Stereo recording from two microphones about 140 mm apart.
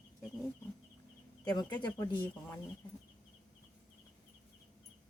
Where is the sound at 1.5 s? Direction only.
30° left (ahead or behind).